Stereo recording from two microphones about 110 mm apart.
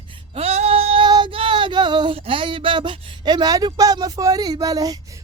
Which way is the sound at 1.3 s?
50° right (ahead or behind).